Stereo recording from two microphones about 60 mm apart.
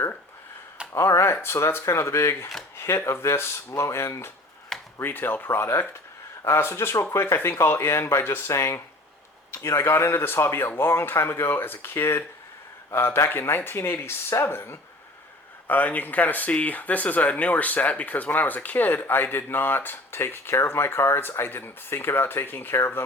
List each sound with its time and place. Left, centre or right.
0.9 s speech: left
4.9 s speech: left
6.4 s speech: left
15.6 s speech: left